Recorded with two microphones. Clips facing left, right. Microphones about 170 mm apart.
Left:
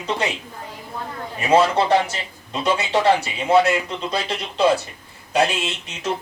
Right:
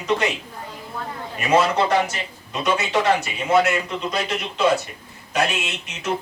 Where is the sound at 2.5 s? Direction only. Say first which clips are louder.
Left 1 dB; 30° left (ahead or behind).